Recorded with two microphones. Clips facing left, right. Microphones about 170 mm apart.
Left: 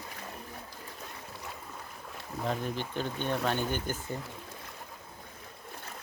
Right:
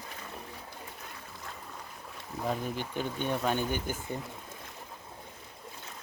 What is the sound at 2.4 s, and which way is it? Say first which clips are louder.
Speech: even; 10° right (ahead or behind).